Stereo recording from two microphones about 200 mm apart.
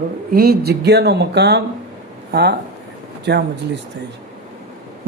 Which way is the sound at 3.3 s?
60° right (ahead or behind).